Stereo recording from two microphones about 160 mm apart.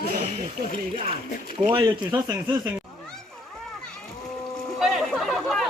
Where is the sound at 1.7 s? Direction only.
30° right (ahead or behind).